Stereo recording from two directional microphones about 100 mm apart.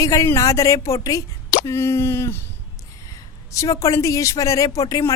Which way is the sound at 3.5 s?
30° left (ahead or behind).